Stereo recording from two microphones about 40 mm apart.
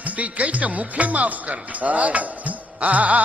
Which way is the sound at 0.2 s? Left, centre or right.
Right.